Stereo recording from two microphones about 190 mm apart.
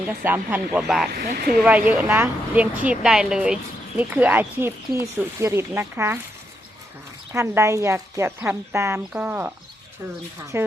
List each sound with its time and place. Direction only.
0.1 s a woman's voice: 10° right (ahead or behind)
1.1 s speech: 50° right (ahead or behind)
1.6 s a woman's voice: 5° right (ahead or behind)
7.3 s a woman's voice: 15° right (ahead or behind)
10.5 s a woman's voice: 15° right (ahead or behind)